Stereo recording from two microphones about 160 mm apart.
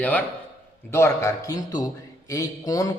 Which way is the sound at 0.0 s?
10° left (ahead or behind).